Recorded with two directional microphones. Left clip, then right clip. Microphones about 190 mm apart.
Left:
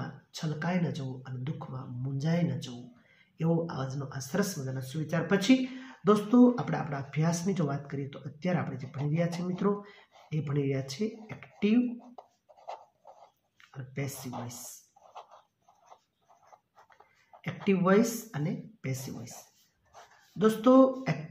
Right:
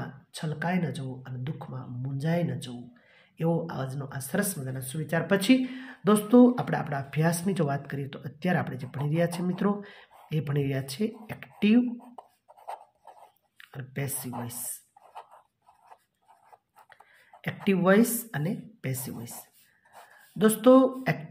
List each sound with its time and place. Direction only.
0.0 s speech: 40° right (ahead or behind)
12.2 s a sound: 5° right (ahead or behind)
13.6 s speech: 45° right (ahead or behind)
17.6 s speech: 45° right (ahead or behind)
20.3 s speech: 45° right (ahead or behind)